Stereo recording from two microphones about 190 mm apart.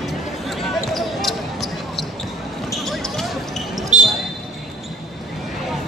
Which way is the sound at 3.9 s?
40° right (ahead or behind).